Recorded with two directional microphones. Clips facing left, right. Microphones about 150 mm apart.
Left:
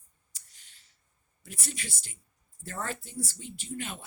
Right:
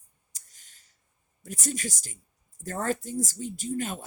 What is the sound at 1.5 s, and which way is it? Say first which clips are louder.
A woman's voice: right 8 dB; 45° right (ahead or behind).